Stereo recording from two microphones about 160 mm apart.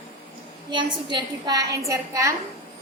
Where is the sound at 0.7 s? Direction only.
30° right (ahead or behind).